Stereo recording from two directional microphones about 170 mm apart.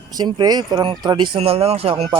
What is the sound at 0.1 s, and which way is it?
Speech, 25° right (ahead or behind).